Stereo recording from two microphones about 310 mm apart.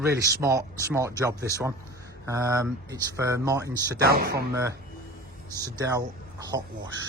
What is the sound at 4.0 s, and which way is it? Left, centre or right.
Speech, right.